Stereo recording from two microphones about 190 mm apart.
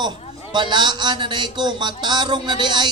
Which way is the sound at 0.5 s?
25° right (ahead or behind).